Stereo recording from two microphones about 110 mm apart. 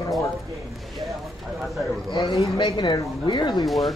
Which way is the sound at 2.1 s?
50° left (ahead or behind).